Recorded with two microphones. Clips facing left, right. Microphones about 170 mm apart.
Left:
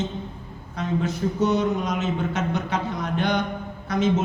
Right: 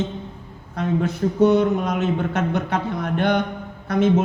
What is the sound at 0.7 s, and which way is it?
Speech, 55° right (ahead or behind).